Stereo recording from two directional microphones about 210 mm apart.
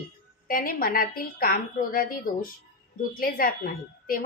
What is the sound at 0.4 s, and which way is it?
A woman's voice, 40° left (ahead or behind).